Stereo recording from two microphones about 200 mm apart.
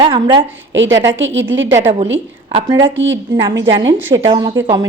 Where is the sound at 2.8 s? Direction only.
70° right (ahead or behind).